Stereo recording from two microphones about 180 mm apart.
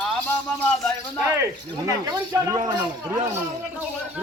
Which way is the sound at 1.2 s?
15° right (ahead or behind).